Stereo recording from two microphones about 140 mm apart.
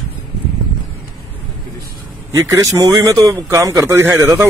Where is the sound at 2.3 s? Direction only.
25° right (ahead or behind).